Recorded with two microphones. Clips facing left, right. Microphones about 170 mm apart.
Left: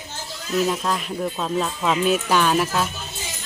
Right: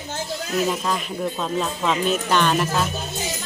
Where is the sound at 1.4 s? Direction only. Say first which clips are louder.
Left 1 dB; centre (ahead or behind).